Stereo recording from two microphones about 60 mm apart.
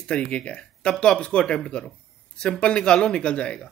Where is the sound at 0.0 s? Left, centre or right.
Left.